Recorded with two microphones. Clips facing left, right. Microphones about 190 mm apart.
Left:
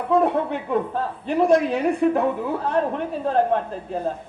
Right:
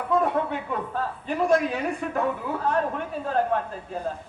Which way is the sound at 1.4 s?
30° left (ahead or behind).